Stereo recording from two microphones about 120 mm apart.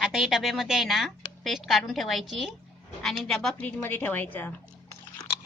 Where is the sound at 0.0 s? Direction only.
5° right (ahead or behind).